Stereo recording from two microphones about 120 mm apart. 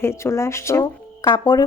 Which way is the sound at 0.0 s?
20° left (ahead or behind).